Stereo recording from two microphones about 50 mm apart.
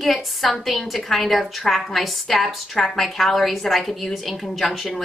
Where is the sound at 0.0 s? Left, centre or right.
Centre.